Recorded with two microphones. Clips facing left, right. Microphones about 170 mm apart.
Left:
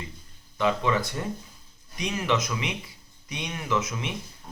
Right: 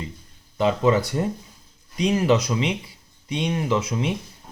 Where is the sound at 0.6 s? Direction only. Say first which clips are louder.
Right 5 dB; 35° right (ahead or behind).